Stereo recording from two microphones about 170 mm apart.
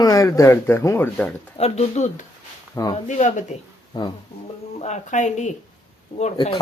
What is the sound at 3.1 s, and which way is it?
Speech, 45° left (ahead or behind).